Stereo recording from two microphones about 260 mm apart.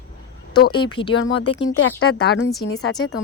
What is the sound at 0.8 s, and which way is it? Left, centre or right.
Speech, centre.